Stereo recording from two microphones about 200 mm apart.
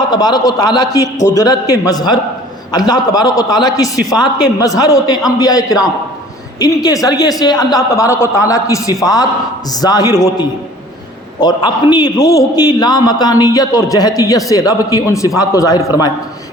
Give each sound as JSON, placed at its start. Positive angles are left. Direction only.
{"t": 0.0, "sound": "a man's voice", "side_deg": 20}